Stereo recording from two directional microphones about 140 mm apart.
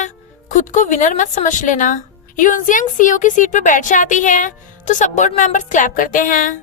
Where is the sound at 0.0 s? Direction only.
60° left (ahead or behind).